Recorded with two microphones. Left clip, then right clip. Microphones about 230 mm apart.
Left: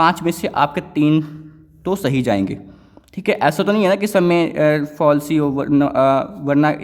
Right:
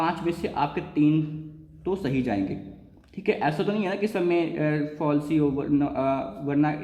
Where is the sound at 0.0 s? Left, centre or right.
Left.